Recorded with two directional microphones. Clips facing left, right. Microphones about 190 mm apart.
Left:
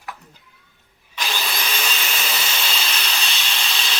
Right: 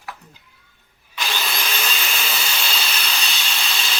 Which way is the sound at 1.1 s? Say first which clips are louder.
Even; centre (ahead or behind).